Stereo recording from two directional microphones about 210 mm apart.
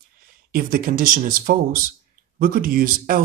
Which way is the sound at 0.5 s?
45° right (ahead or behind).